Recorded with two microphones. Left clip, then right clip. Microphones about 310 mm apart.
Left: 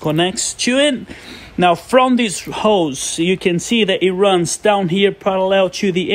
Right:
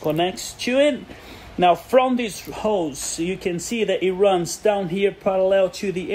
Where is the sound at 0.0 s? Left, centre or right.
Left.